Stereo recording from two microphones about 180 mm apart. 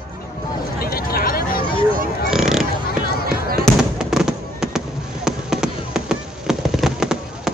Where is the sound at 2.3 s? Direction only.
5° right (ahead or behind).